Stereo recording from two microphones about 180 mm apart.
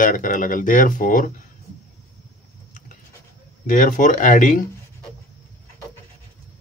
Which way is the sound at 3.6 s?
45° left (ahead or behind).